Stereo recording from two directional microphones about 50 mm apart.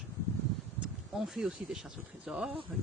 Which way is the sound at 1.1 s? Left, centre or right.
Centre.